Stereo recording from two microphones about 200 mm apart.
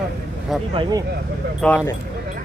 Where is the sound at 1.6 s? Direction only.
10° left (ahead or behind).